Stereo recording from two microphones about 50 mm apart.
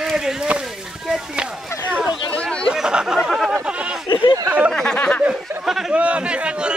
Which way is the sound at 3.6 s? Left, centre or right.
Right.